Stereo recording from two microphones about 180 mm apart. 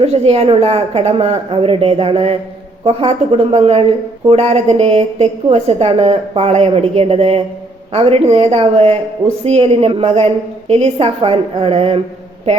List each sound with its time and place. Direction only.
0.0 s a woman's voice: 35° right (ahead or behind)